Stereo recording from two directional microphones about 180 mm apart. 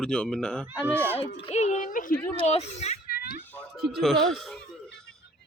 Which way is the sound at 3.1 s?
60° left (ahead or behind).